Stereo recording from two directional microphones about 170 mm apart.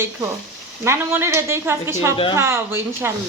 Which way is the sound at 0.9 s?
15° right (ahead or behind).